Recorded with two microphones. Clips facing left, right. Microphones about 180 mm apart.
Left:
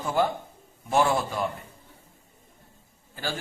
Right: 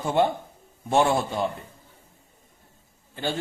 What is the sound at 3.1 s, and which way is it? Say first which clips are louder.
Speech: right 4 dB; 25° right (ahead or behind).